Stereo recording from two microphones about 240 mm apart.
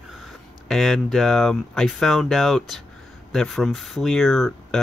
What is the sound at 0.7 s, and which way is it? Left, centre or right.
Speech, centre.